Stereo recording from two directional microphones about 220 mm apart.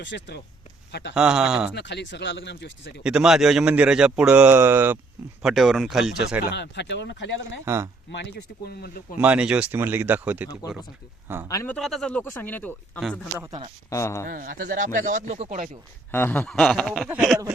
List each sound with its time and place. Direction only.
0.0 s speech: 50° left (ahead or behind)
1.1 s speech: 5° right (ahead or behind)
1.7 s speech: 50° left (ahead or behind)
3.0 s speech: 5° right (ahead or behind)
6.5 s speech: 50° left (ahead or behind)
7.6 s speech: 15° right (ahead or behind)
8.2 s speech: 50° left (ahead or behind)
9.2 s speech: 5° right (ahead or behind)
11.4 s speech: 10° left (ahead or behind)
13.4 s speech: 15° right (ahead or behind)
13.9 s speech: 15° left (ahead or behind)
14.3 s speech: 40° right (ahead or behind)
16.1 s speech: 10° left (ahead or behind)